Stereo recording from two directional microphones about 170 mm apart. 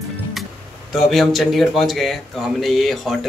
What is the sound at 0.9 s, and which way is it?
Speech, centre (ahead or behind).